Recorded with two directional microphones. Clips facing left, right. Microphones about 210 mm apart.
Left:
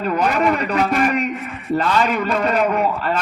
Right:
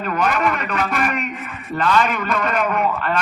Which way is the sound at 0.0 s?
30° left (ahead or behind).